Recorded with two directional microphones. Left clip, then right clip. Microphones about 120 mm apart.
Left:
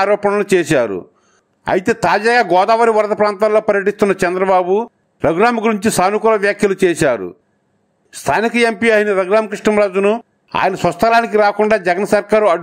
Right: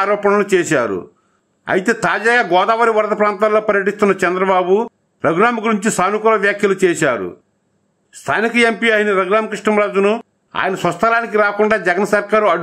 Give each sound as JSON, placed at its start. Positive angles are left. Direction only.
{"t": 0.0, "sound": "speech", "side_deg": 35}